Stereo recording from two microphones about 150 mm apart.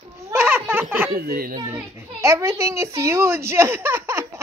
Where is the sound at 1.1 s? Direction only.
90° right.